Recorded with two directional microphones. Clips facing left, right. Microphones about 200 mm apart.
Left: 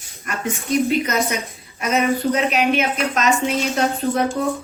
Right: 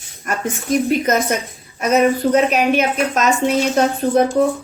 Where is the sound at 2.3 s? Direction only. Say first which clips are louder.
Right 4 dB; 45° right (ahead or behind).